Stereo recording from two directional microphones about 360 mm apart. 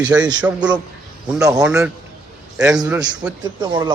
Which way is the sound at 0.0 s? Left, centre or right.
Centre.